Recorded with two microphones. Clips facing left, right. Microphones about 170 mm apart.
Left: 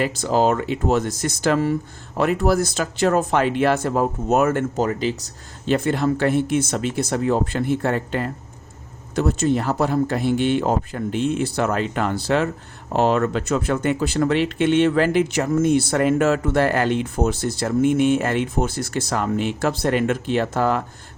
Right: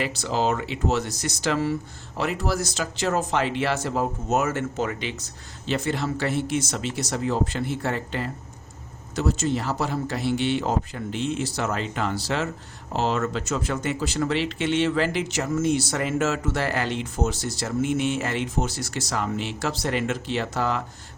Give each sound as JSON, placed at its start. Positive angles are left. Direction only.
{"t": 0.0, "sound": "speech", "side_deg": 45}
{"t": 4.8, "sound": "speech", "side_deg": 40}